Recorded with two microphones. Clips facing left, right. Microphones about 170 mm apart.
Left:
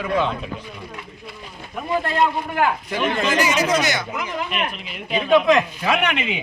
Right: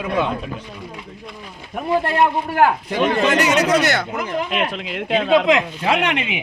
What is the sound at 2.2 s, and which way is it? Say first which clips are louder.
Speech: right 4 dB; 55° right (ahead or behind).